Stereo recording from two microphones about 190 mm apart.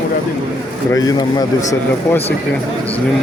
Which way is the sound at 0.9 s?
20° left (ahead or behind).